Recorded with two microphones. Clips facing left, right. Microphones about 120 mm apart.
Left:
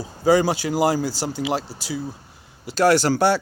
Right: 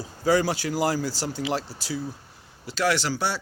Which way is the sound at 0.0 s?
15° left (ahead or behind).